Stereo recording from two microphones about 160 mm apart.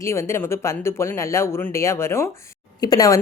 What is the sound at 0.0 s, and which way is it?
A woman's voice, 15° left (ahead or behind).